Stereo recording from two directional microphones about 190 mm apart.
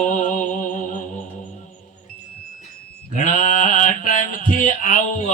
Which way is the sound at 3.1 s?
40° left (ahead or behind).